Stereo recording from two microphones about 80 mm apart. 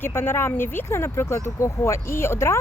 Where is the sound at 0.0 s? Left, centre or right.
Left.